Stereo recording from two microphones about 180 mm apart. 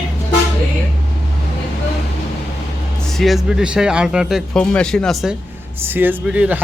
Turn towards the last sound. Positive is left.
turn(degrees=-10)  # may be behind; listen again after turning